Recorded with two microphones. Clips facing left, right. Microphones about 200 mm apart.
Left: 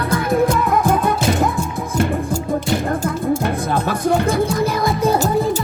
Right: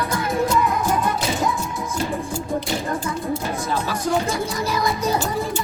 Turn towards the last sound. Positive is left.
turn(degrees=55)  # may be behind; listen again after turning